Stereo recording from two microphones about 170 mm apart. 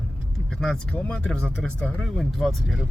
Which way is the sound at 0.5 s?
5° left (ahead or behind).